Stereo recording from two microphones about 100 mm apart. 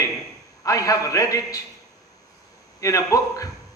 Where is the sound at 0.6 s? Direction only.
35° left (ahead or behind).